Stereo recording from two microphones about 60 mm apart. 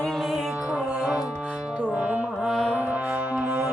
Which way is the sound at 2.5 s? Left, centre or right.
Centre.